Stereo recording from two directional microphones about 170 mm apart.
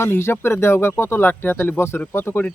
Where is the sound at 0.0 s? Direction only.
15° left (ahead or behind).